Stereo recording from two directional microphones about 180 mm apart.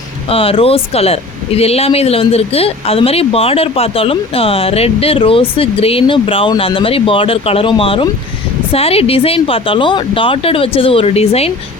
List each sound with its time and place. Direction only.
0.3 s speech: 30° left (ahead or behind)